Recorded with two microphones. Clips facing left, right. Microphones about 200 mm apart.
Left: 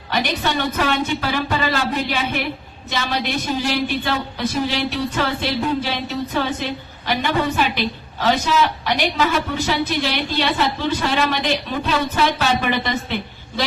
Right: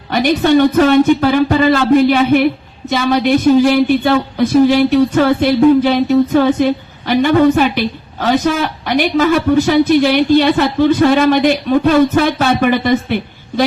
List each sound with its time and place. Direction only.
0.1 s a woman's voice: 50° right (ahead or behind)